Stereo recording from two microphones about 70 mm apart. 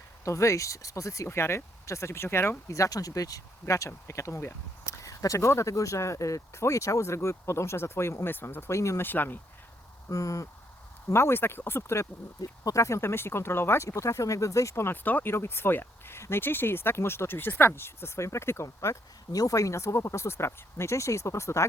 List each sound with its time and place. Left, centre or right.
0.3 s speech: left
2.7 s speech: left
5.0 s speech: left
9.0 s speech: left
10.1 s speech: left
11.1 s speech: left
12.4 s speech: left
14.8 s speech: left
19.3 s speech: left